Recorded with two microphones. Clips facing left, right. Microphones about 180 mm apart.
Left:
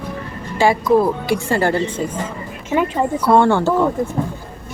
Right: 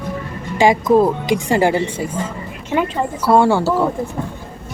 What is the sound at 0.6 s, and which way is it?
Speech, 20° right (ahead or behind).